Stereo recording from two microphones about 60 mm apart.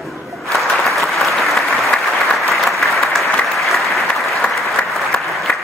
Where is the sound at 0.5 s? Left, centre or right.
Centre.